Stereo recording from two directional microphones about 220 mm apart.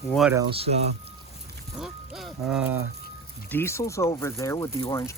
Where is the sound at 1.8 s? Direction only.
Centre (ahead or behind).